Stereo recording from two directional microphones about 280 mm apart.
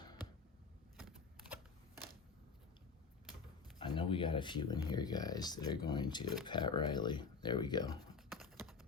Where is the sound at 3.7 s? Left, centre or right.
Centre.